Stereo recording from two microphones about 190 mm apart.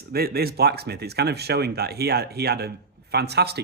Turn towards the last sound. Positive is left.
turn(degrees=-60)  # may be behind; listen again after turning